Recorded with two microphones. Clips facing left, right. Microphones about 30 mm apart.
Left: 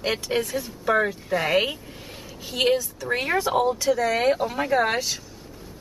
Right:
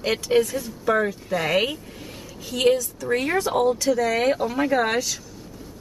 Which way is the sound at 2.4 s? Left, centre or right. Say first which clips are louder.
Right 2 dB; centre.